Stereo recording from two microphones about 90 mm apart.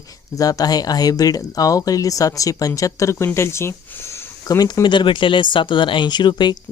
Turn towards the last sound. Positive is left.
turn(degrees=55)  # may be behind; listen again after turning